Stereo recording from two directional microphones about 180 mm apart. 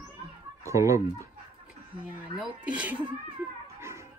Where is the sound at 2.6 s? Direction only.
5° right (ahead or behind).